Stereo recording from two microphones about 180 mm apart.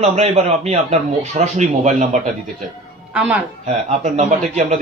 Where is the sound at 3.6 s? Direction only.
40° right (ahead or behind).